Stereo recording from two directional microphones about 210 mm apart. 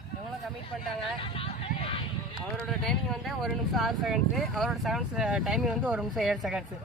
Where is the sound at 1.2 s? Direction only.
25° left (ahead or behind).